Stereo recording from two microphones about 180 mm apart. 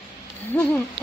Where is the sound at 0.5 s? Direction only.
10° left (ahead or behind).